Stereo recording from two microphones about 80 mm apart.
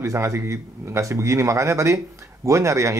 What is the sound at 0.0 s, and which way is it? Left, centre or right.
Speech, right.